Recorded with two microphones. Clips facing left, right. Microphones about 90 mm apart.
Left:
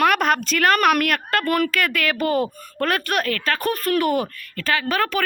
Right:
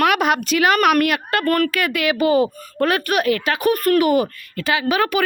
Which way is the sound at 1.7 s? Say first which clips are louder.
Right 2 dB; 5° right (ahead or behind).